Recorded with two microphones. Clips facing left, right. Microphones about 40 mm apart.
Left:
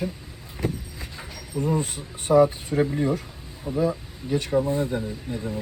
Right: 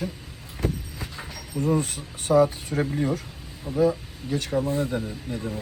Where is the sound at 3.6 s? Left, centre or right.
Centre.